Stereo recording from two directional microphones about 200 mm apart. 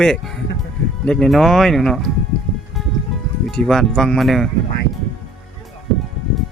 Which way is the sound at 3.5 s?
5° left (ahead or behind).